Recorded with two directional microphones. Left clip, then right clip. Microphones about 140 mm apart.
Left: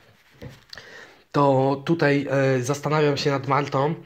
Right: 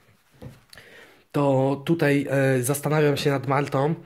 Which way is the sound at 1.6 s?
35° right (ahead or behind).